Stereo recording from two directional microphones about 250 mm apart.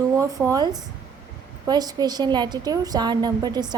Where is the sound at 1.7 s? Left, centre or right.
Centre.